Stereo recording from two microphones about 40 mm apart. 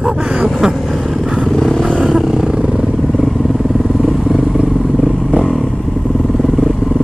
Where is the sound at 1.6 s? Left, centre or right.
Centre.